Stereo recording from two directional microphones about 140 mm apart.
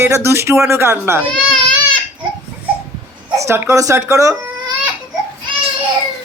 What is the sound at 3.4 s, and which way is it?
Speech, 20° right (ahead or behind).